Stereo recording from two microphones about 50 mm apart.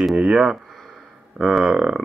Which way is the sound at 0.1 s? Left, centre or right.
Centre.